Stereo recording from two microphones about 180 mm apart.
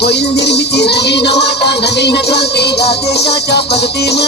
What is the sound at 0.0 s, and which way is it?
Music, 70° left (ahead or behind).